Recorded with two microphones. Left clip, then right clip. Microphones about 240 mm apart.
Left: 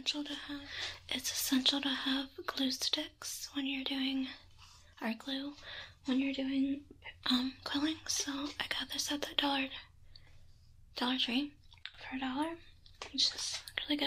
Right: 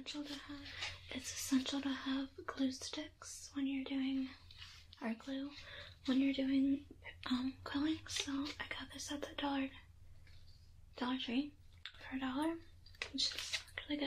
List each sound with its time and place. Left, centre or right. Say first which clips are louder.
0.0 s speech: left 9 dB; left
7.2 s speech: left 7 dB; left
11.0 s speech: left 6 dB; left
13.7 s whispering: left 7 dB; left